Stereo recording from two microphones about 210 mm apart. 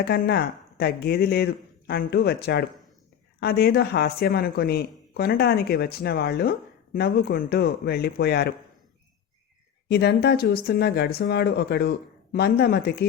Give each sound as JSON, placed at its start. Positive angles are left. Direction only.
{"t": 0.0, "sound": "speech", "side_deg": 50}
{"t": 9.9, "sound": "speech", "side_deg": 50}